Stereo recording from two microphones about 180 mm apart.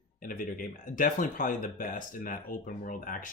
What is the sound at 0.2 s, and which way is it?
Speech, 50° left (ahead or behind).